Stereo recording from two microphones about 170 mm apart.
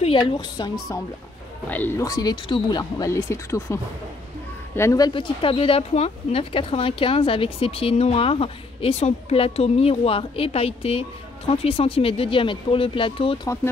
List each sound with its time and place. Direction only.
0.0 s speech: 30° left (ahead or behind)
1.7 s speech: 10° left (ahead or behind)
2.0 s speech: 20° left (ahead or behind)